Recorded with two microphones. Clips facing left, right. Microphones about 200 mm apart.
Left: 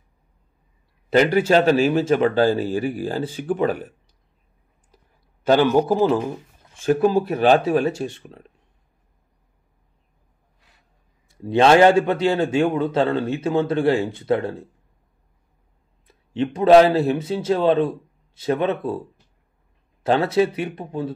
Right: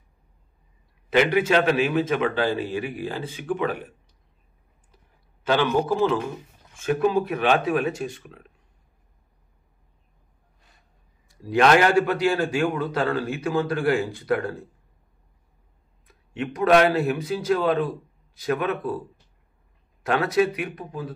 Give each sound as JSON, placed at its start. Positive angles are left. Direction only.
{"t": 1.1, "sound": "a man's voice", "side_deg": 35}
{"t": 5.4, "sound": "a man's voice", "side_deg": 40}
{"t": 11.2, "sound": "a man's voice", "side_deg": 25}
{"t": 16.1, "sound": "a man's voice", "side_deg": 30}